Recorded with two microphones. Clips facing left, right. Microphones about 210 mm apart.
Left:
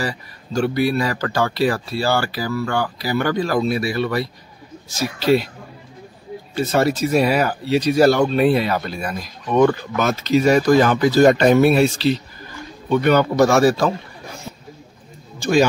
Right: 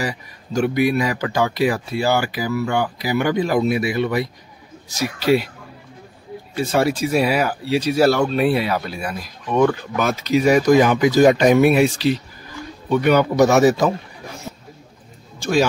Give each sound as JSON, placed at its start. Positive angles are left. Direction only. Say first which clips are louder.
{"t": 0.0, "sound": "speech", "louder": "even", "side_deg": -15}
{"t": 6.6, "sound": "speech", "louder": "left 1 dB", "side_deg": -10}
{"t": 10.1, "sound": "speech", "louder": "even", "side_deg": -10}